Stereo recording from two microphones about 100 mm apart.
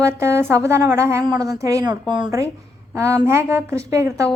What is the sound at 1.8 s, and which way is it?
Speech, 45° right (ahead or behind).